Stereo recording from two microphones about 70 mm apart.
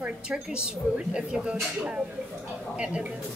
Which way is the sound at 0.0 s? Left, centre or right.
Centre.